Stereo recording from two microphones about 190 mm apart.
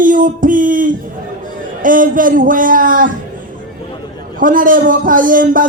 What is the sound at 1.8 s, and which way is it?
A man's voice, 45° right (ahead or behind).